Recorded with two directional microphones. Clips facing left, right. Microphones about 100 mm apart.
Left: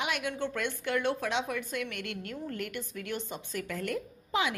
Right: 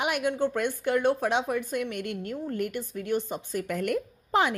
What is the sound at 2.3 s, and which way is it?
Speech, 50° left (ahead or behind).